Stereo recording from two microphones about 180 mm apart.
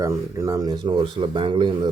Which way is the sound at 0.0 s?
20° right (ahead or behind).